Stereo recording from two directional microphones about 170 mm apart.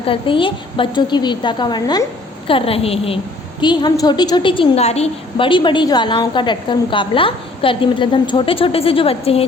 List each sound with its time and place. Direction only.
0.0 s a woman's voice: 30° left (ahead or behind)